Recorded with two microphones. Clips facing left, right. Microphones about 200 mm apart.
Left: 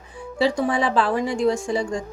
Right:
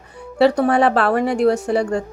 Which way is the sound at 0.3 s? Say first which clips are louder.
Right 6 dB; 65° right (ahead or behind).